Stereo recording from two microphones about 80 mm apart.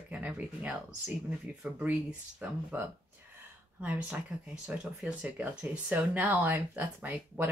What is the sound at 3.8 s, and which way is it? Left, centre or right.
Speech, centre.